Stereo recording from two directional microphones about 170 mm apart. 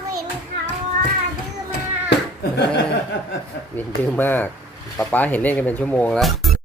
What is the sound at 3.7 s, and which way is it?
Speech, 10° left (ahead or behind).